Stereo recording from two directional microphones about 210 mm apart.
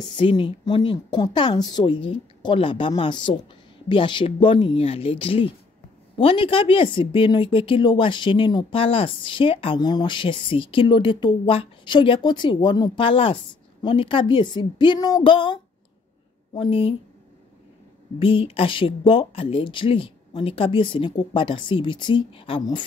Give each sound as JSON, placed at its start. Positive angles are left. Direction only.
{"t": 0.0, "sound": "speech", "side_deg": 20}
{"t": 18.2, "sound": "speech", "side_deg": 25}